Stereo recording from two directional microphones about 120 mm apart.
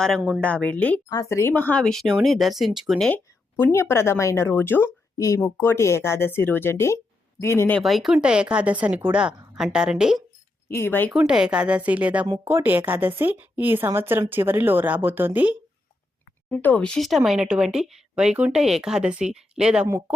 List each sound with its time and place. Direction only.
0.2 s speech: centre (ahead or behind)
0.4 s speech: 10° left (ahead or behind)
1.1 s speech: 25° left (ahead or behind)
1.8 s speech: 5° left (ahead or behind)
3.6 s speech: 20° left (ahead or behind)
5.1 s speech: 25° left (ahead or behind)
7.8 s speech: centre (ahead or behind)
10.7 s speech: 20° left (ahead or behind)
11.3 s speech: 5° right (ahead or behind)
16.5 s speech: 15° left (ahead or behind); by 19.9 s 5° right (ahead or behind)